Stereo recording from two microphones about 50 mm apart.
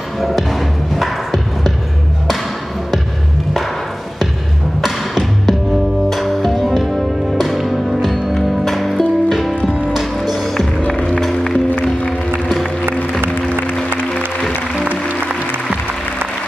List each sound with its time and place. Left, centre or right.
0.2 s music: centre
4.8 s a sound: centre
6.0 s music: centre
13.5 s music: left